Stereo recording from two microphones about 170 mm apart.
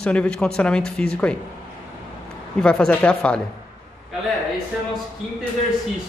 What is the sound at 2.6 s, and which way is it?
Speech, 5° left (ahead or behind).